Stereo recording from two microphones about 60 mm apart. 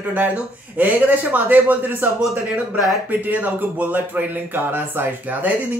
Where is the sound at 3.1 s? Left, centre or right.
Right.